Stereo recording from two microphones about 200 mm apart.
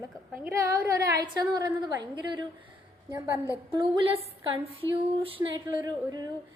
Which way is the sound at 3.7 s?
25° right (ahead or behind).